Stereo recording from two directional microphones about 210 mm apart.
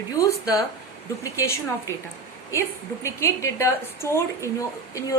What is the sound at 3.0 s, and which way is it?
A woman's voice, 15° left (ahead or behind).